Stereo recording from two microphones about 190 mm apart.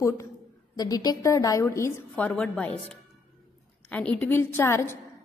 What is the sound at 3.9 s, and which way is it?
A woman's voice, 5° left (ahead or behind).